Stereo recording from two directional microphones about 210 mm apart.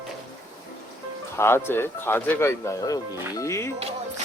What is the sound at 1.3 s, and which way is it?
Speech, 10° left (ahead or behind).